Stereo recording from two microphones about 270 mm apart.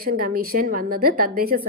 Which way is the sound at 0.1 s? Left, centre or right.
Right.